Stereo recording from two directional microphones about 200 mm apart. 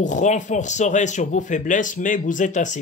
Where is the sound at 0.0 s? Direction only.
40° left (ahead or behind).